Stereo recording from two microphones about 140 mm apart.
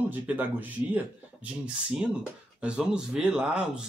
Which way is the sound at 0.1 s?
10° right (ahead or behind).